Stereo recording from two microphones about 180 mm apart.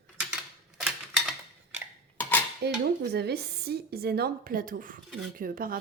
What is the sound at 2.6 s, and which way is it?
Speech, 65° right (ahead or behind).